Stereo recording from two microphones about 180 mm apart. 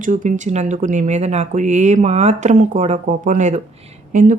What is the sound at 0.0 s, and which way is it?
Speech, 45° right (ahead or behind).